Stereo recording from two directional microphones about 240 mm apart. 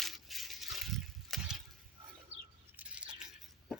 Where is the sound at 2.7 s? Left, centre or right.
Centre.